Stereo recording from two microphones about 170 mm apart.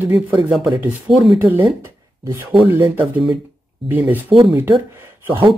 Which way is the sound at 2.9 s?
5° right (ahead or behind).